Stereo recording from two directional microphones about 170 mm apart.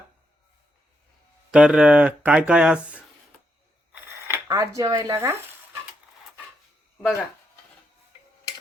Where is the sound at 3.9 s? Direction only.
15° right (ahead or behind).